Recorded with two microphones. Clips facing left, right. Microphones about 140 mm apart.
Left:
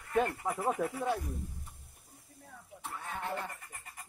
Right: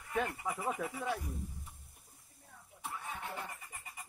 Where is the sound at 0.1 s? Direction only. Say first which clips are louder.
Left 5 dB; 50° left (ahead or behind).